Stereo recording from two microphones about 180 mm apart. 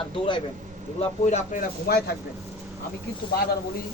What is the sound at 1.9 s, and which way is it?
Speech, 60° left (ahead or behind).